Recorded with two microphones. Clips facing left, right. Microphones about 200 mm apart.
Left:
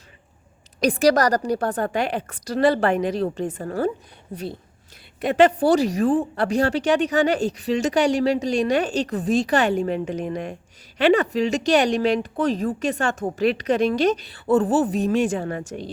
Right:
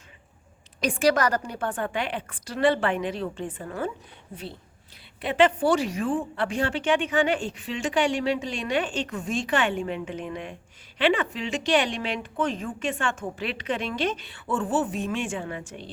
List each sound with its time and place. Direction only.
0.8 s a woman's voice: 40° left (ahead or behind)